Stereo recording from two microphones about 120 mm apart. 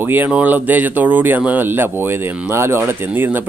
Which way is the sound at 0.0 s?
15° right (ahead or behind).